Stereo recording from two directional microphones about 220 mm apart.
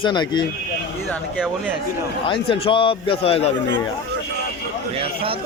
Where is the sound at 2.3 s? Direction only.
25° left (ahead or behind).